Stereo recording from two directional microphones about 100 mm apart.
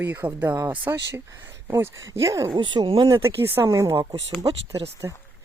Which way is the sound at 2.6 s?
55° right (ahead or behind).